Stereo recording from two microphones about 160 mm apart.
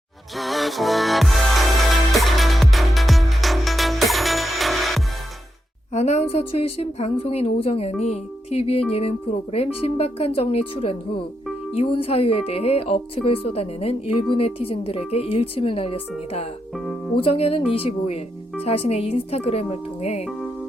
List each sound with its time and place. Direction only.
0.3 s music: centre (ahead or behind)
5.9 s a woman's voice: 45° left (ahead or behind)
16.7 s speech: centre (ahead or behind)
17.2 s a woman's voice: 35° left (ahead or behind)
20.2 s music: centre (ahead or behind)